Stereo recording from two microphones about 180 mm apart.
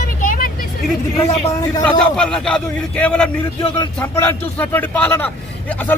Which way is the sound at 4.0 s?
10° left (ahead or behind).